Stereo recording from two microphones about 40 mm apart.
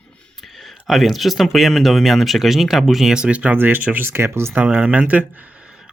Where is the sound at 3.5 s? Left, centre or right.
Right.